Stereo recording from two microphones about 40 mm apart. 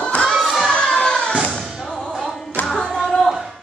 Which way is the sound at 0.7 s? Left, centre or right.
Centre.